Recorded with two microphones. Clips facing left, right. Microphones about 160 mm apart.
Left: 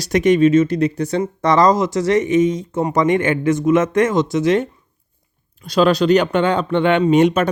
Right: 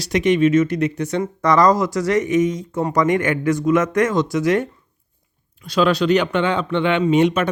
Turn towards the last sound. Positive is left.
turn(degrees=40)  # may be behind; listen again after turning